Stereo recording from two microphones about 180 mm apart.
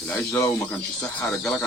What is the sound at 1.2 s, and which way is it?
Speech, centre (ahead or behind).